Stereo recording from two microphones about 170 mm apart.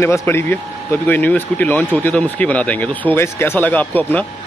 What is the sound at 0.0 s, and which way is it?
Speech, 15° left (ahead or behind).